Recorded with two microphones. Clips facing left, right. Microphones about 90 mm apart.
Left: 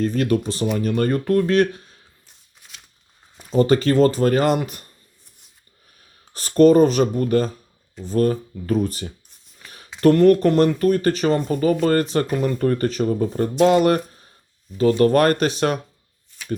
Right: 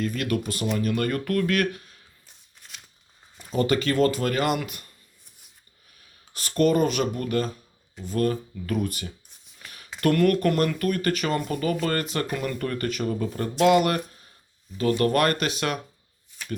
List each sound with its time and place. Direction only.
0.0 s speech: 35° left (ahead or behind)
2.6 s a sound: 5° left (ahead or behind)
3.5 s speech: 35° left (ahead or behind)
6.3 s speech: 35° left (ahead or behind)
9.6 s a sound: 35° left (ahead or behind)
10.0 s speech: 30° left (ahead or behind)